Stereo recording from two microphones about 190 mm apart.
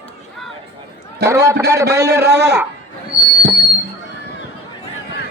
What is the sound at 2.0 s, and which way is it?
Speech, 60° right (ahead or behind).